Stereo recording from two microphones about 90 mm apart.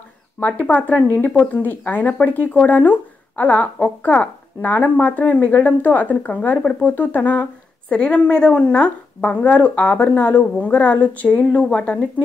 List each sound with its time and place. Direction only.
0.4 s speech: 15° left (ahead or behind)